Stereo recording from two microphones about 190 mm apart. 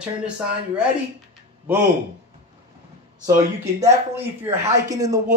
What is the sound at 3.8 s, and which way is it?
A man's voice, 10° right (ahead or behind).